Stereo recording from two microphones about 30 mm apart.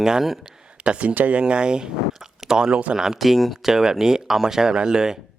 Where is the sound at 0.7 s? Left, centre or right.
Right.